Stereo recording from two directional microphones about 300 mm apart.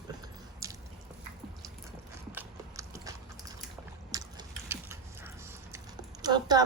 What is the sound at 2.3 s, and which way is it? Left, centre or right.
Clip-clop, centre.